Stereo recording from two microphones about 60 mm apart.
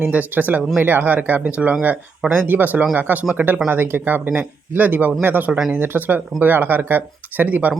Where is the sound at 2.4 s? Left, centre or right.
Right.